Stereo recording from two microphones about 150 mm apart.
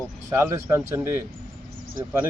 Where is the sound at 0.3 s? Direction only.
15° right (ahead or behind).